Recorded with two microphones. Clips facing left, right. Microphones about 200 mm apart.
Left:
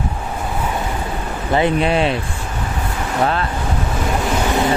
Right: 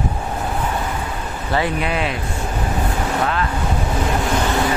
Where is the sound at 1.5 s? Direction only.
25° left (ahead or behind).